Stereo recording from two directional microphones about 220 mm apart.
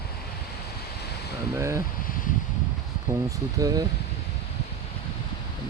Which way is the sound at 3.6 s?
15° right (ahead or behind).